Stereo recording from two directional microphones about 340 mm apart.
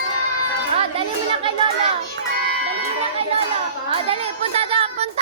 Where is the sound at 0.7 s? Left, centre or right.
Centre.